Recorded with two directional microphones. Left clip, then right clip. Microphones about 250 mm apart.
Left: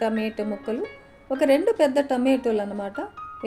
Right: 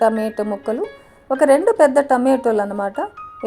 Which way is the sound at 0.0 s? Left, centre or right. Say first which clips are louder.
Right 8 dB; centre.